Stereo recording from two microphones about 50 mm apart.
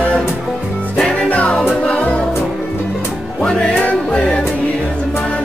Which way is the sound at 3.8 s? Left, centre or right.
Left.